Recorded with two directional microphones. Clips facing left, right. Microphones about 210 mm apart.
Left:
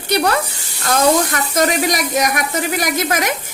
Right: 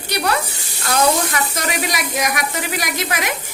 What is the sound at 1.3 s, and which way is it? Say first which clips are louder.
Speech: left 6 dB; 45° left (ahead or behind).